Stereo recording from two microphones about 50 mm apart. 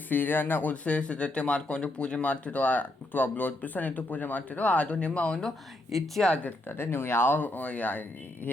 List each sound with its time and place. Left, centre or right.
0.1 s speech: left
0.7 s speech: left
5.5 s speech: centre
6.2 s speech: left
6.7 s speech: left
7.3 s speech: left
8.5 s a sound: left